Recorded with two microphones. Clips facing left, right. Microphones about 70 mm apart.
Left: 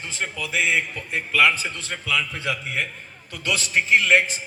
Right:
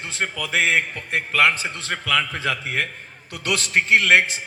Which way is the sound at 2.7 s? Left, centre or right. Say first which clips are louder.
Right 2 dB; right.